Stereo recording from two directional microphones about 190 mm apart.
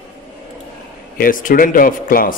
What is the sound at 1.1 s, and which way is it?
A man's voice, 45° left (ahead or behind).